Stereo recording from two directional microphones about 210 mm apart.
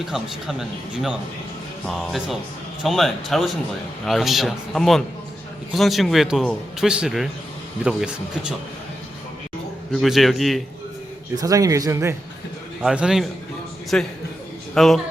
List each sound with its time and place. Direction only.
0.0 s a man's voice: centre (ahead or behind)
9.9 s a man's voice: centre (ahead or behind)
11.3 s speech: 15° right (ahead or behind)
12.8 s a man's voice: 5° right (ahead or behind)